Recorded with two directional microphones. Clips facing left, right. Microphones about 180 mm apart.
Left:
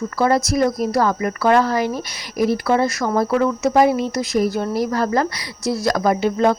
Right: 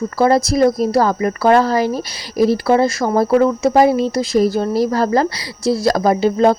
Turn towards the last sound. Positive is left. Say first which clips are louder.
# right 4 dB
turn(degrees=-30)  # may be behind; listen again after turning